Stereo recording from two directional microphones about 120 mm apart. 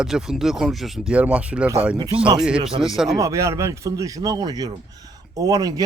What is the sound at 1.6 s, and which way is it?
Speech, 20° right (ahead or behind).